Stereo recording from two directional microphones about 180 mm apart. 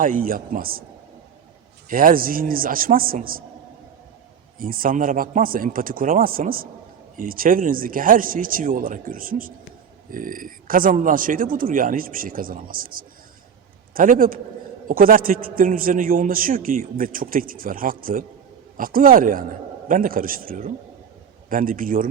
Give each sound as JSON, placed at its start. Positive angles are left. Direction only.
{"t": 0.0, "sound": "a man's voice", "side_deg": -50}
{"t": 1.9, "sound": "a man's voice", "side_deg": -50}
{"t": 4.5, "sound": "a man's voice", "side_deg": -50}